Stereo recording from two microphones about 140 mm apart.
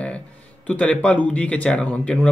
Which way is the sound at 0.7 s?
10° left (ahead or behind).